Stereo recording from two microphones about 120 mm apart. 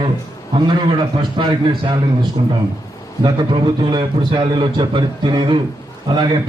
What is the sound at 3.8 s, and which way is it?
A man's voice, 40° right (ahead or behind).